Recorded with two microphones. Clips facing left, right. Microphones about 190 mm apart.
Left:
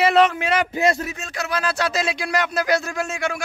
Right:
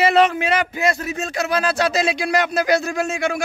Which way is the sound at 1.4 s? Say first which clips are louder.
Right 3 dB; 20° right (ahead or behind).